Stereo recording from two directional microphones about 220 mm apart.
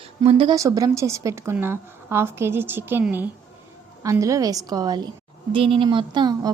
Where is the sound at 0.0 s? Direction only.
25° right (ahead or behind).